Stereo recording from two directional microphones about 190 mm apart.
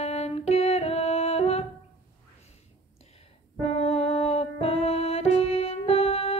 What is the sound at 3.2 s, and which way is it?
Music, 30° left (ahead or behind).